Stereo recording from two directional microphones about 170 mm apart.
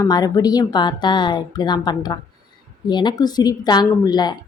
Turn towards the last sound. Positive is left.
turn(degrees=25)  # may be behind; listen again after turning